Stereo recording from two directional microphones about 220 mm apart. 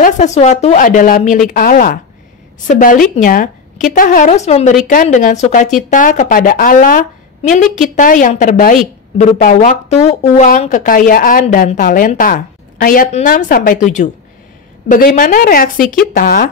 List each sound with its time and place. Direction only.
0.0 s a woman's voice: 30° left (ahead or behind)